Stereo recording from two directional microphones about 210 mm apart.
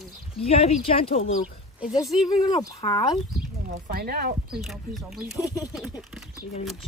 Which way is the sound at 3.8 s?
45° right (ahead or behind).